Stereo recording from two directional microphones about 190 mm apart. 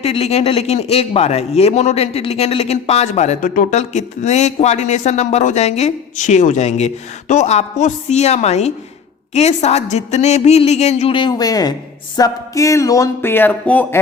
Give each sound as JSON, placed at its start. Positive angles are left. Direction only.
{"t": 0.0, "sound": "a man's voice", "side_deg": 35}